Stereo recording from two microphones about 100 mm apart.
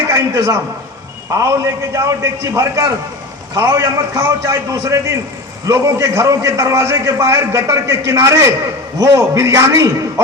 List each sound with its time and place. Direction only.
0.1 s a man's voice: 30° right (ahead or behind)